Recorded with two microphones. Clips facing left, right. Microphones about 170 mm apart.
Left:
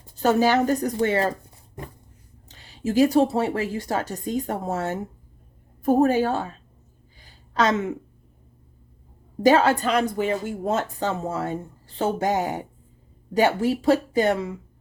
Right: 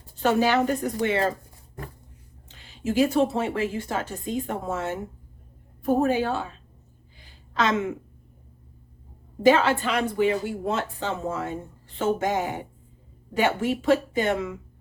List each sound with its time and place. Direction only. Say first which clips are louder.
0.2 s speech: left 2 dB; 40° left (ahead or behind)
2.5 s a woman's voice: left 2 dB; 40° left (ahead or behind)
7.2 s a sound: left 3 dB; 40° left (ahead or behind)
9.4 s speech: left 2 dB; 40° left (ahead or behind)